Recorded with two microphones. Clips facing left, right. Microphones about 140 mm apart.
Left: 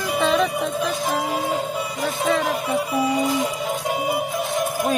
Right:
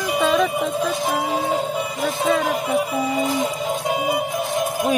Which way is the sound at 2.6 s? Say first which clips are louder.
Right 2 dB; 25° right (ahead or behind).